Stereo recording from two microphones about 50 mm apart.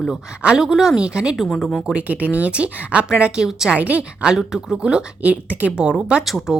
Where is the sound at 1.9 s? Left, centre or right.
Right; by 3.7 s centre.